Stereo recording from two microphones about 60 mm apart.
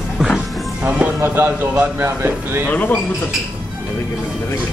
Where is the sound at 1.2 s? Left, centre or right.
Right.